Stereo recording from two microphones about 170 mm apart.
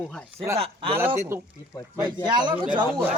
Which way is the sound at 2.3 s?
25° right (ahead or behind).